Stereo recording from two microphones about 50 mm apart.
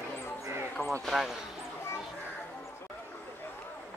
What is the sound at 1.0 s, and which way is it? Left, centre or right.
Speech, centre.